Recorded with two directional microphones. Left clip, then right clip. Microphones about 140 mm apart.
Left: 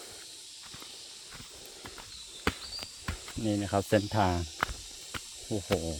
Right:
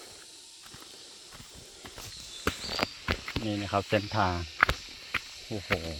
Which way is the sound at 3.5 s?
35° left (ahead or behind).